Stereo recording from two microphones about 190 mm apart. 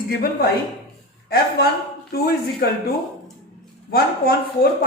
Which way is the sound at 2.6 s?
55° left (ahead or behind).